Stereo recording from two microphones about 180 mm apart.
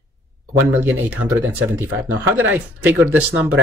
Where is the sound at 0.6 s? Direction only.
10° right (ahead or behind).